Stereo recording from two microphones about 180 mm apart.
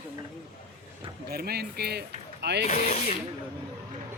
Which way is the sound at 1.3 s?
60° right (ahead or behind).